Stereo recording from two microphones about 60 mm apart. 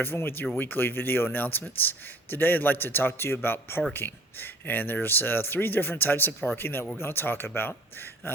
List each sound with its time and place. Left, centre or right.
0.0 s speech: left